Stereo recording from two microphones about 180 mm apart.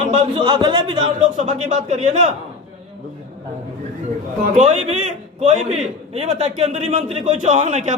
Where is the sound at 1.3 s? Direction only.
40° right (ahead or behind).